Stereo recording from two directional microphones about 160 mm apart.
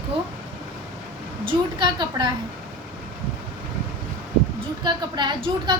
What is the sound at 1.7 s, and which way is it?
Speech, 30° right (ahead or behind).